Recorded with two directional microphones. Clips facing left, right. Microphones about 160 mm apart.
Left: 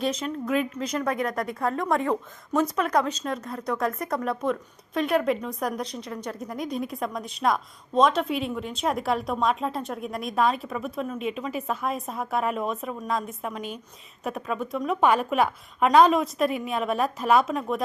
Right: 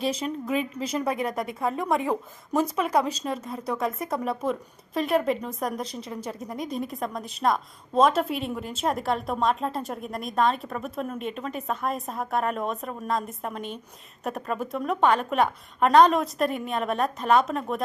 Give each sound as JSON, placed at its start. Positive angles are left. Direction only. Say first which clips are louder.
{"t": 0.2, "sound": "a woman's voice", "louder": "left 1 dB", "side_deg": 0}